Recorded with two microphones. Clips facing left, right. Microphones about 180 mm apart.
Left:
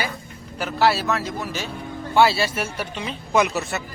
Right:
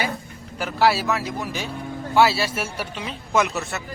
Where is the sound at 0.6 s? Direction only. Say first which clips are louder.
Even; centre (ahead or behind).